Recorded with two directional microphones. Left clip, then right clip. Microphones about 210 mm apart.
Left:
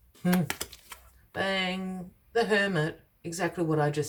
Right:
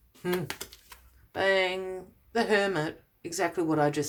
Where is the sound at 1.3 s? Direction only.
30° right (ahead or behind).